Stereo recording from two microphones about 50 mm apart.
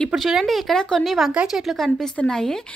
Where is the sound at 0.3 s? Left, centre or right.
Centre.